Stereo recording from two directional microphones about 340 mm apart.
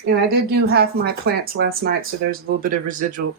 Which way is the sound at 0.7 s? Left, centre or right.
Right.